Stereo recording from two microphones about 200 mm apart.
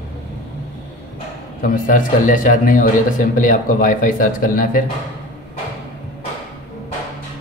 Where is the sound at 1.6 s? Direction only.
40° left (ahead or behind).